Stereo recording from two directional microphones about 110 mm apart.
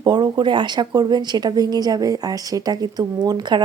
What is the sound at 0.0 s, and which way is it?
Speech, 40° right (ahead or behind).